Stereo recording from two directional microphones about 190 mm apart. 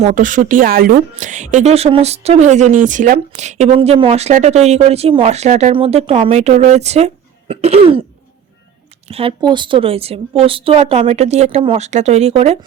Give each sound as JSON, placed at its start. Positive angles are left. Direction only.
{"t": 0.0, "sound": "speech", "side_deg": -45}
{"t": 9.0, "sound": "speech", "side_deg": -30}